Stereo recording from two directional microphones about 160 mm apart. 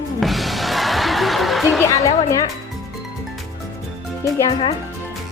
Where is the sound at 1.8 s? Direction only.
20° left (ahead or behind).